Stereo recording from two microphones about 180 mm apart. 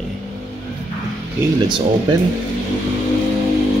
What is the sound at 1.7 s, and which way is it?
Speech, 25° right (ahead or behind).